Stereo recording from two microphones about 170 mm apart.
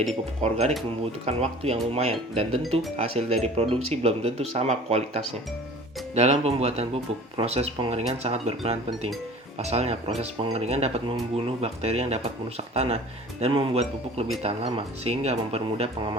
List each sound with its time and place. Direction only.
0.1 s speech: 40° right (ahead or behind)
15.6 s speech: 30° right (ahead or behind)